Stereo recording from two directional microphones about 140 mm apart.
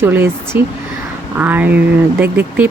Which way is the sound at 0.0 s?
15° right (ahead or behind).